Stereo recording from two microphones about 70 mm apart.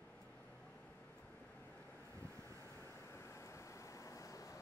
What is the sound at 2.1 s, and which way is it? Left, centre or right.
Vehicle, left.